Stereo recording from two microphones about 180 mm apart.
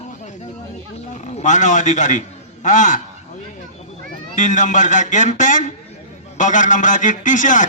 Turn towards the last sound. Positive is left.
turn(degrees=45)  # may be behind; listen again after turning